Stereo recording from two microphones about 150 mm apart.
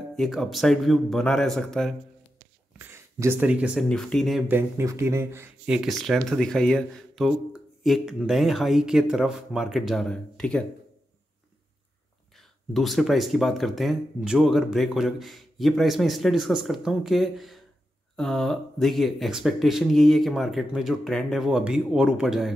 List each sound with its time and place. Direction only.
0.1 s speech: centre (ahead or behind)
2.9 s speech: 15° right (ahead or behind)
3.9 s speech: 5° left (ahead or behind)
4.5 s speech: 15° right (ahead or behind)
5.7 s speech: centre (ahead or behind)
12.4 s speech: centre (ahead or behind)